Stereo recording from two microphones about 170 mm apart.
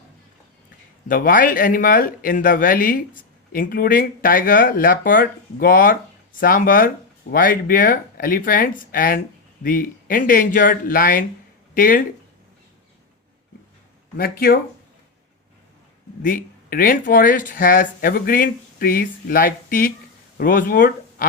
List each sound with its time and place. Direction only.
1.0 s speech: 55° left (ahead or behind)
14.2 s speech: 60° left (ahead or behind)
16.2 s speech: 55° left (ahead or behind)